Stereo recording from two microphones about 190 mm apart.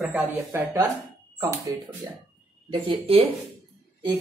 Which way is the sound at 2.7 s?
30° right (ahead or behind).